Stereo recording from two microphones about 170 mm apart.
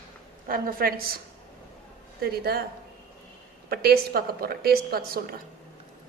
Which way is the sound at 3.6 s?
65° right (ahead or behind).